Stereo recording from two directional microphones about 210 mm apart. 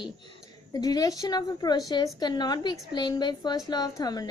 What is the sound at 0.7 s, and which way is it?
A woman's voice, 20° left (ahead or behind).